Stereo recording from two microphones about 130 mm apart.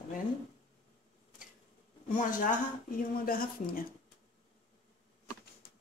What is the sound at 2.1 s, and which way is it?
Speech, 90° left.